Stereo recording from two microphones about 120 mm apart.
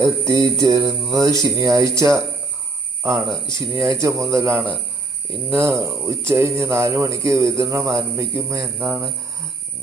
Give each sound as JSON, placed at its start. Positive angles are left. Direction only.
{"t": 0.0, "sound": "speech", "side_deg": -25}
{"t": 3.4, "sound": "speech", "side_deg": -25}
{"t": 8.8, "sound": "speech", "side_deg": -10}